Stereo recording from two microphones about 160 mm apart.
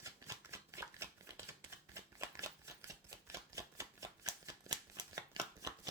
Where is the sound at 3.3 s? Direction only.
20° right (ahead or behind).